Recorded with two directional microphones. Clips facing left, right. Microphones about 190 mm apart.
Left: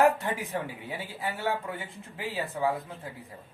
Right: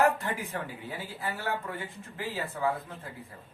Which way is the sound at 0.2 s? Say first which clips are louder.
Left 2 dB; 20° left (ahead or behind).